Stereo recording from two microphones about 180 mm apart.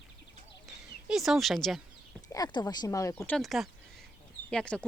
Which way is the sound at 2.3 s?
20° left (ahead or behind).